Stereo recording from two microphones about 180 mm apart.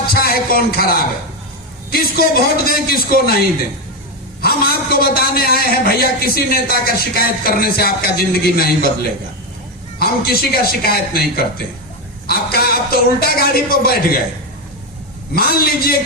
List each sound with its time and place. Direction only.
0.1 s a sound: 55° left (ahead or behind)
1.9 s a man's voice: 55° left (ahead or behind)
4.4 s a man's voice: 60° left (ahead or behind)
10.0 s a man's voice: 55° left (ahead or behind)
15.4 s a man's voice: 60° left (ahead or behind)